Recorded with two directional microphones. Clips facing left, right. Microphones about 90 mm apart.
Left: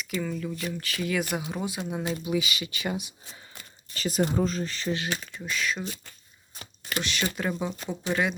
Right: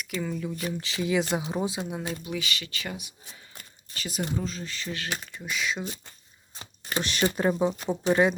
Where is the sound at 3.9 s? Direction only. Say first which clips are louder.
Left 6 dB; 40° left (ahead or behind).